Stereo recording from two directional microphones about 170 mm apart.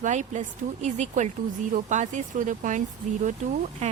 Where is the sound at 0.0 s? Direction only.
45° right (ahead or behind).